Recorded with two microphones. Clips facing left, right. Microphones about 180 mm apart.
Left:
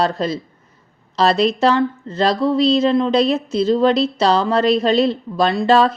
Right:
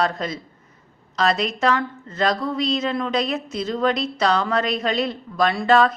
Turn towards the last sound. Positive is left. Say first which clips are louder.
# left 3 dB
turn(degrees=30)  # may be behind; listen again after turning